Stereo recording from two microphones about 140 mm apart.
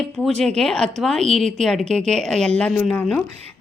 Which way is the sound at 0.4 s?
5° left (ahead or behind).